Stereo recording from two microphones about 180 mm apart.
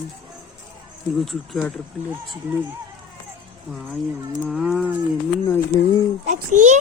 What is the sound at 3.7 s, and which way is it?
Cattle, centre (ahead or behind).